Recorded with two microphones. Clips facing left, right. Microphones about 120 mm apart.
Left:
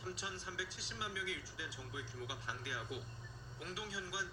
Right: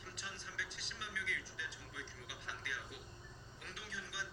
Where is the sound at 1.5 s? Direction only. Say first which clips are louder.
Left 2 dB; 25° left (ahead or behind).